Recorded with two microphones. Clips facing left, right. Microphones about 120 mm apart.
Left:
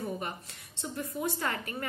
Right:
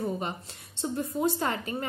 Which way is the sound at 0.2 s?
25° right (ahead or behind).